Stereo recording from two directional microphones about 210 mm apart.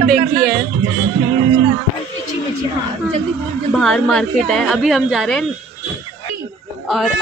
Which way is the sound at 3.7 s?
Centre (ahead or behind).